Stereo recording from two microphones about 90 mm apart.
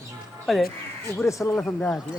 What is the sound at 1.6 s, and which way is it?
Speech, 5° left (ahead or behind).